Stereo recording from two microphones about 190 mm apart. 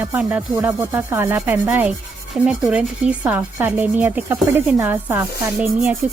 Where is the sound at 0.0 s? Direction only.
10° right (ahead or behind).